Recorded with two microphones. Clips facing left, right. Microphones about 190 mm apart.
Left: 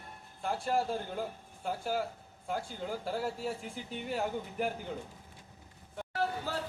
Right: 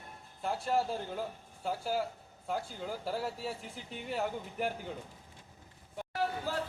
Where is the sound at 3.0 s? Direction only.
Centre (ahead or behind).